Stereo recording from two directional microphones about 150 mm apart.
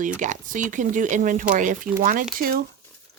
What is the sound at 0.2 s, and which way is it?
Speech, 55° right (ahead or behind).